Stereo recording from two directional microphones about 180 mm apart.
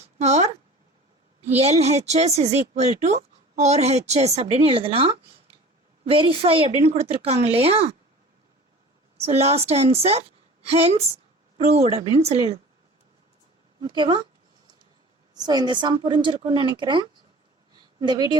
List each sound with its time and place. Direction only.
0.2 s speech: 35° right (ahead or behind)
9.1 s a woman's voice: 35° right (ahead or behind)
13.8 s a woman's voice: 25° right (ahead or behind)
15.4 s a woman's voice: 25° right (ahead or behind)